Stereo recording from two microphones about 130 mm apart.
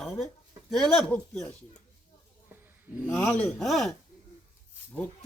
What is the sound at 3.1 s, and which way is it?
Speech, 10° left (ahead or behind).